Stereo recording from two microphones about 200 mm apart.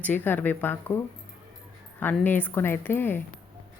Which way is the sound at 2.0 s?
10° left (ahead or behind).